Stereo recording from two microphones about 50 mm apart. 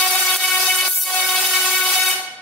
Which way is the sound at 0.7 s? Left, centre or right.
Centre.